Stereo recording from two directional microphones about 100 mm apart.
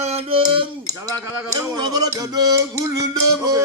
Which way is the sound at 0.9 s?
40° right (ahead or behind).